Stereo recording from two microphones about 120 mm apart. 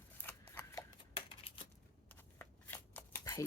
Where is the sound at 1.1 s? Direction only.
50° left (ahead or behind).